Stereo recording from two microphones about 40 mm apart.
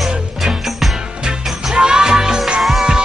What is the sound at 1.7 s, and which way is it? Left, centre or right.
Music, centre.